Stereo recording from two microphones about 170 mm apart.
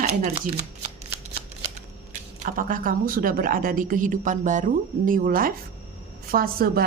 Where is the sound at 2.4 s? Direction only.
50° right (ahead or behind).